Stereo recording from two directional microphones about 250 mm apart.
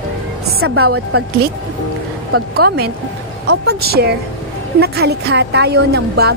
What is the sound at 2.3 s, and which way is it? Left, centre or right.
Speech, right.